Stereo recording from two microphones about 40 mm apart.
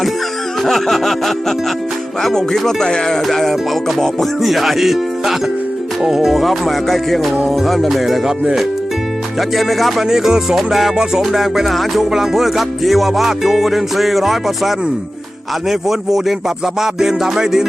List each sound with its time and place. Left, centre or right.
0.6 s a sound: centre
3.2 s music: centre
9.6 s music: centre
10.0 s music: centre
15.7 s music: centre